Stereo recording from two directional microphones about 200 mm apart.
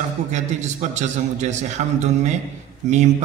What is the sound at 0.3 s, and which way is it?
A man's voice, 35° right (ahead or behind).